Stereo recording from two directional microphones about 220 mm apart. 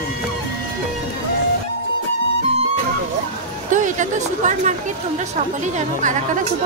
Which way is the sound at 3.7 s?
35° right (ahead or behind).